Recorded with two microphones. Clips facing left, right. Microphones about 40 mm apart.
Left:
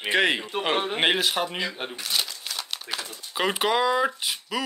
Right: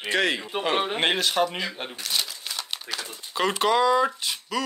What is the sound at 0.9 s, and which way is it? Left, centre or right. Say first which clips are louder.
Speech: even; centre.